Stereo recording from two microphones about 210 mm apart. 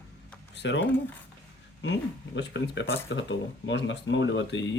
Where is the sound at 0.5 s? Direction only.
55° left (ahead or behind).